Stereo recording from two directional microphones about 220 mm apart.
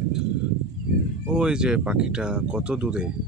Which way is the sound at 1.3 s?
5° right (ahead or behind).